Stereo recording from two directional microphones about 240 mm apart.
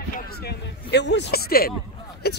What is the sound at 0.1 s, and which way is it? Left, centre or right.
A woman's voice, left.